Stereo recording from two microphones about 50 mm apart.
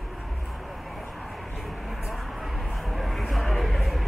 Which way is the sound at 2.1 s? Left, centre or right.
Centre.